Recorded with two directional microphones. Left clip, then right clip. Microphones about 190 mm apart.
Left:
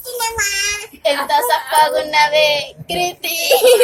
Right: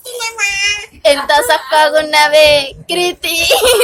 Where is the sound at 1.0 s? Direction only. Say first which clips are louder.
Right 5 dB; 50° right (ahead or behind).